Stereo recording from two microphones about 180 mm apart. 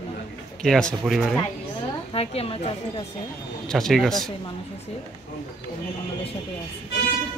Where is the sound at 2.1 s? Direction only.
30° left (ahead or behind).